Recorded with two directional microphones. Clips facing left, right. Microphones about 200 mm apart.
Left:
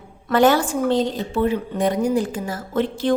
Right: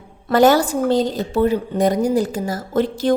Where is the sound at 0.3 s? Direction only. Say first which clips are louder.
Right 3 dB; 40° right (ahead or behind).